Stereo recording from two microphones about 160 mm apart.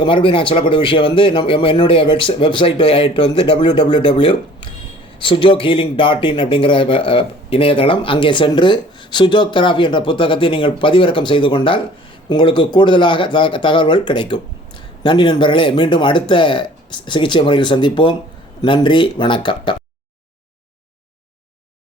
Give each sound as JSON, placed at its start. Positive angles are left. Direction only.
{"t": 0.0, "sound": "speech", "side_deg": 35}